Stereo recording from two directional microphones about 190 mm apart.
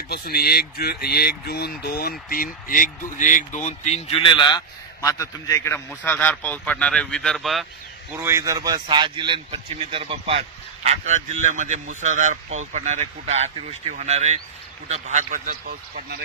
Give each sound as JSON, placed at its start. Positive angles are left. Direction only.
{"t": 0.1, "sound": "speech", "side_deg": 55}
{"t": 8.2, "sound": "speech", "side_deg": -15}